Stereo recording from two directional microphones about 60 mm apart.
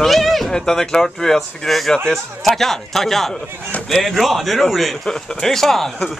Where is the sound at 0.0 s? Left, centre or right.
Centre.